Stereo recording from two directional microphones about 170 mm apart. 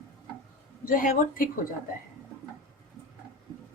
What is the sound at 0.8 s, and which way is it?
Speech, 55° left (ahead or behind).